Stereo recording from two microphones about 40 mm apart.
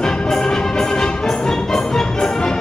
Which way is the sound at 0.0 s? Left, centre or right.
Centre.